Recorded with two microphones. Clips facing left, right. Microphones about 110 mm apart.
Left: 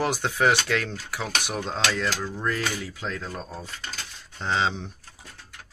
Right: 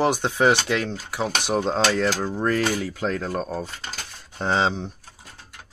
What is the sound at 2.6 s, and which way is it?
Speech, 40° right (ahead or behind).